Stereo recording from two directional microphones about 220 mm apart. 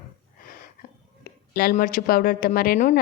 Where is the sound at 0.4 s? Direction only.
40° left (ahead or behind).